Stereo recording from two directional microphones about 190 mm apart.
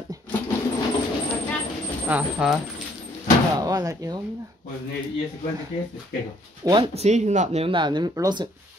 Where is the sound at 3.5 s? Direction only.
20° right (ahead or behind).